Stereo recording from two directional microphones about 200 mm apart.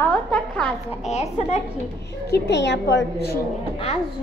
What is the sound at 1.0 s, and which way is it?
Speech, 35° left (ahead or behind).